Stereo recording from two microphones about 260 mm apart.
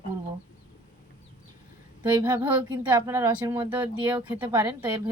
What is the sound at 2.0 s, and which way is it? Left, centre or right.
Speech, centre.